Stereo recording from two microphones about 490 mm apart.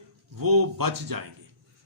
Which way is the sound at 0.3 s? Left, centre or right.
Right.